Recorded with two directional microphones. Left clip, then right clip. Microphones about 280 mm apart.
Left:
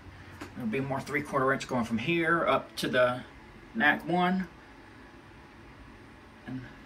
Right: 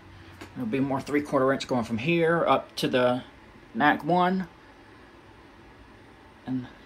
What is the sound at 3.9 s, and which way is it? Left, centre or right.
Speech, right.